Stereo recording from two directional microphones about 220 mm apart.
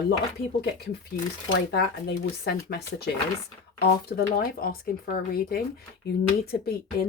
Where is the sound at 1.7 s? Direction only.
45° left (ahead or behind).